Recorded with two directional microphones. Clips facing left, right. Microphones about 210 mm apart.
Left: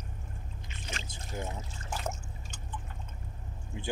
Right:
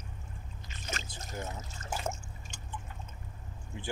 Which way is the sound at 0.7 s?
45° right (ahead or behind).